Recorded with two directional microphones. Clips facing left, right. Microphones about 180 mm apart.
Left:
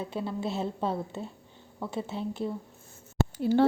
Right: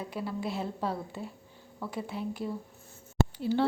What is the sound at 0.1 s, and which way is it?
A woman's voice, 25° left (ahead or behind).